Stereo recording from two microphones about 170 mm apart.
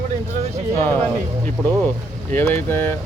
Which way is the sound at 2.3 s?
15° left (ahead or behind).